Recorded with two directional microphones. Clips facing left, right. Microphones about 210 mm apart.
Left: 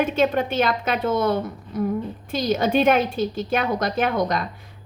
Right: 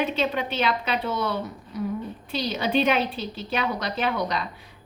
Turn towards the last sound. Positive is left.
turn(degrees=50)  # may be behind; listen again after turning